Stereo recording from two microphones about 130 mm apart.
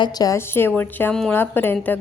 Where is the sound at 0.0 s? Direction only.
30° left (ahead or behind).